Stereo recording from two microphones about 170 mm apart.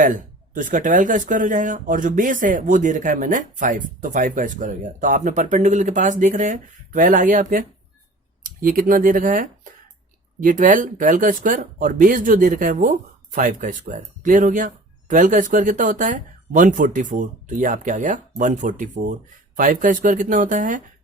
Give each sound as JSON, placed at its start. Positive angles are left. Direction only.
{"t": 0.0, "sound": "speech", "side_deg": -50}
{"t": 8.6, "sound": "speech", "side_deg": -55}